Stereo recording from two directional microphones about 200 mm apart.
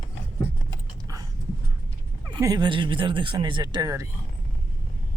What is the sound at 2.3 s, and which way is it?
Speech, 20° right (ahead or behind).